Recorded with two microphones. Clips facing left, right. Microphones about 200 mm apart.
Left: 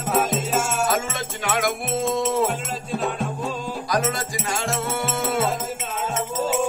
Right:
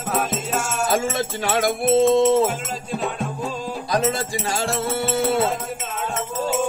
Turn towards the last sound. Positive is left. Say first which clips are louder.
# right 4 dB
turn(degrees=-35)  # may be behind; listen again after turning